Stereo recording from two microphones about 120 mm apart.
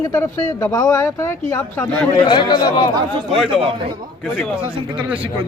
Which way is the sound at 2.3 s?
40° left (ahead or behind).